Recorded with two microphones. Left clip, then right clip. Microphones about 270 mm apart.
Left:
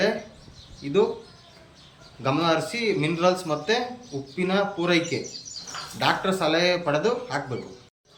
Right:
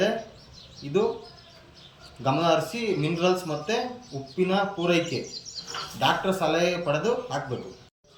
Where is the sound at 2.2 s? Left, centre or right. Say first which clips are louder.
Even; centre.